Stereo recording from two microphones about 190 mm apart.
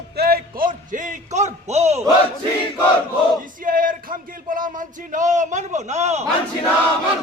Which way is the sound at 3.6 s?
45° right (ahead or behind).